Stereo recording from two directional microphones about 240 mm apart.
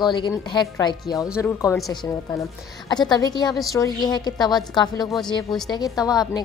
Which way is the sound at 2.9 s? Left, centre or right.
Centre.